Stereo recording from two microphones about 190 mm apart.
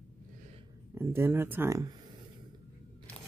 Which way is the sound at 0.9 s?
15° right (ahead or behind).